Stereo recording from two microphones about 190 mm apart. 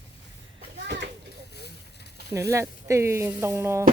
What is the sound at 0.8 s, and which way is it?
Children playing, 65° right (ahead or behind).